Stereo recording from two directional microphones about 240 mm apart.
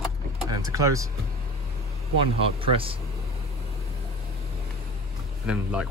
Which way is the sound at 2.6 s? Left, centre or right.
Right.